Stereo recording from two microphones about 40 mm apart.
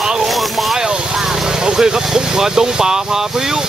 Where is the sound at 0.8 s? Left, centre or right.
Centre.